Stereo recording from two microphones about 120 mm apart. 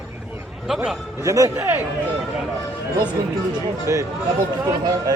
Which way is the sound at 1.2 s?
25° right (ahead or behind).